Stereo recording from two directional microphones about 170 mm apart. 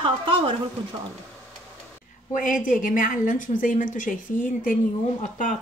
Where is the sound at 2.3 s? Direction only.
50° left (ahead or behind).